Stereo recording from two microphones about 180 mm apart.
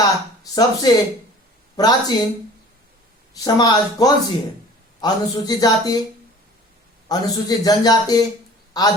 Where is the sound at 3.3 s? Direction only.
20° left (ahead or behind).